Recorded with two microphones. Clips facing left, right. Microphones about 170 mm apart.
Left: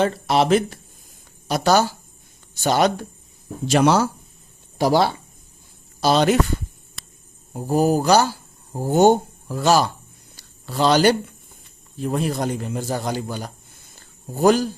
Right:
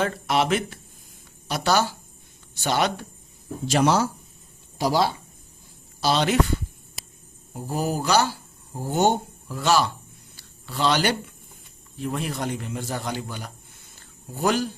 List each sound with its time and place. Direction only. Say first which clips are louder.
0.0 s a man's voice: left 4 dB; 35° left (ahead or behind)
3.7 s speech: left 4 dB; 65° left (ahead or behind)
6.0 s speech: left 5 dB; 45° left (ahead or behind)
7.5 s speech: left 8 dB; 45° left (ahead or behind)
10.3 s a sound: left 6 dB; 40° left (ahead or behind)
11.9 s a man's voice: left 5 dB; 40° left (ahead or behind)